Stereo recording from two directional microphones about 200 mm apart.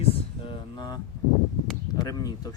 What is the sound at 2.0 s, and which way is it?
Speech, 20° left (ahead or behind).